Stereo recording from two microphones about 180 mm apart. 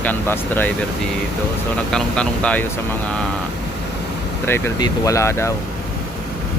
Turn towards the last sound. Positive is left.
turn(degrees=15)  # may be behind; listen again after turning